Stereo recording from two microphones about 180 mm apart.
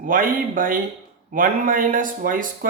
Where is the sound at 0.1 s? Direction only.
50° right (ahead or behind).